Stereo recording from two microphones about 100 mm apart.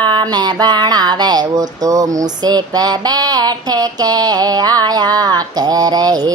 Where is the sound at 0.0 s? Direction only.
50° right (ahead or behind).